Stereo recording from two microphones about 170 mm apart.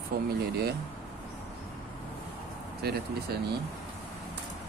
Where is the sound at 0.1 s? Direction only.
65° right (ahead or behind).